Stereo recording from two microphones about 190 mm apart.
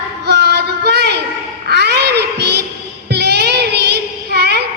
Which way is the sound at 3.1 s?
60° right (ahead or behind).